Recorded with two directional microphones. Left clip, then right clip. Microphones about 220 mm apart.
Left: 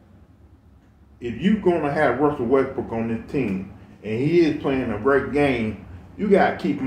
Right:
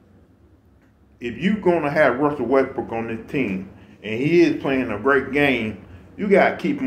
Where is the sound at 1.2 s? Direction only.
20° right (ahead or behind).